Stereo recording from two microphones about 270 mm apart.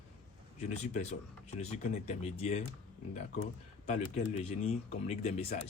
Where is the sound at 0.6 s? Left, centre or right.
Left.